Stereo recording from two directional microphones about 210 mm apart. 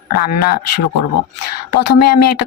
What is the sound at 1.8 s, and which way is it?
Speech, 50° left (ahead or behind).